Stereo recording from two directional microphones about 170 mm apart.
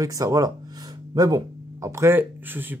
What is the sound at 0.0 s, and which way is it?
A man's voice, 20° right (ahead or behind).